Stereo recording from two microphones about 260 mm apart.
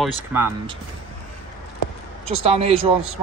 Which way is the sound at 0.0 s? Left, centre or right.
Centre.